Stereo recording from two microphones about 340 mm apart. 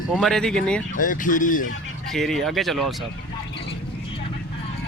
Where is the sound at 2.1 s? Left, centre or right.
Centre.